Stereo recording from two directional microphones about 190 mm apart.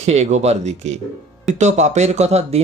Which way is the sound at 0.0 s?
35° right (ahead or behind).